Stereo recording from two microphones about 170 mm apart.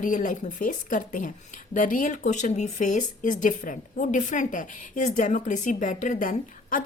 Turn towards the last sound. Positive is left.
turn(degrees=55)  # may be behind; listen again after turning